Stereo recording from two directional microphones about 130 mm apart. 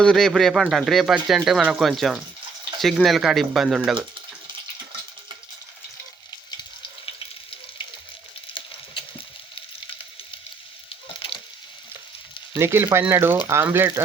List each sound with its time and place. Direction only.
0.0 s speech: 5° left (ahead or behind)
8.5 s frying: 40° left (ahead or behind)
12.5 s speech: 20° right (ahead or behind)